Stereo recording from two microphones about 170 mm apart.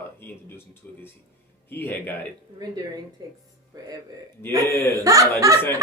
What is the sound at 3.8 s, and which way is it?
Speech, 20° right (ahead or behind).